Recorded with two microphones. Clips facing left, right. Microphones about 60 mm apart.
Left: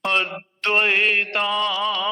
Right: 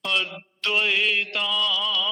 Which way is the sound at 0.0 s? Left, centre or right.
Left.